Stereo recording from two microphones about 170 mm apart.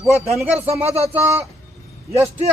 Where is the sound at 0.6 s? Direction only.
35° right (ahead or behind).